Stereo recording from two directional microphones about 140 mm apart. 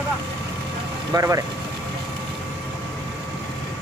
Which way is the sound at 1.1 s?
25° right (ahead or behind).